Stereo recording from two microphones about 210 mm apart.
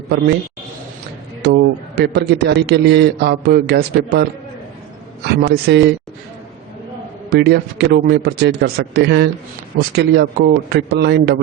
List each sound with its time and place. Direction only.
1.4 s a man's voice: 50° right (ahead or behind)
7.3 s a man's voice: 50° right (ahead or behind)